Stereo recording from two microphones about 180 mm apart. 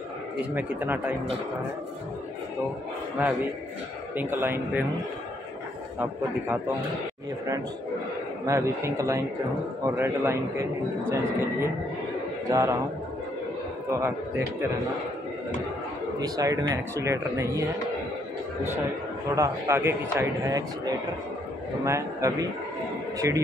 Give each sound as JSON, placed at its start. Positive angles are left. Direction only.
{"t": 0.6, "sound": "speech", "side_deg": -10}
{"t": 3.2, "sound": "speech", "side_deg": -10}
{"t": 8.5, "sound": "speech", "side_deg": -15}
{"t": 12.4, "sound": "a man's voice", "side_deg": -20}
{"t": 16.2, "sound": "speech", "side_deg": -20}
{"t": 19.3, "sound": "speech", "side_deg": -15}
{"t": 21.8, "sound": "a man's voice", "side_deg": -15}